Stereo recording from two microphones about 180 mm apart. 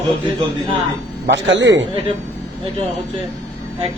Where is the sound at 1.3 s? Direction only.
90° right.